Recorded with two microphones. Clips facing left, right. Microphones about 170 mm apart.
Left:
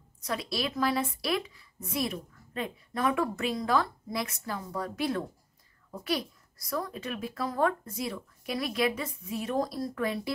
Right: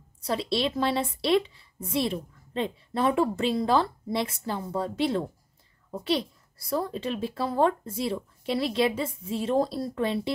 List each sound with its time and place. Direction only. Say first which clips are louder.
0.2 s a woman's voice: right 5 dB; 30° right (ahead or behind)